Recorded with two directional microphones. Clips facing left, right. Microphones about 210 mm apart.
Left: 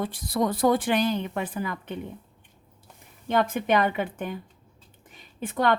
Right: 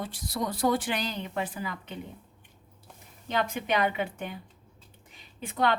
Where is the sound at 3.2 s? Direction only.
50° left (ahead or behind).